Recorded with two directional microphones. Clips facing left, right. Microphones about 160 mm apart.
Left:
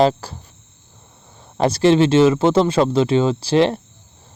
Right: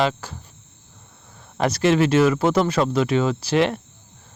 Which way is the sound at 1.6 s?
30° left (ahead or behind).